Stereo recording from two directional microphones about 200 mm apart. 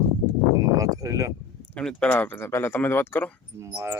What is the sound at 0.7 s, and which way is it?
Speech, 15° right (ahead or behind).